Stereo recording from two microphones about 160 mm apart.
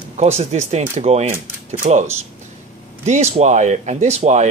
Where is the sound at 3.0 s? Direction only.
45° right (ahead or behind).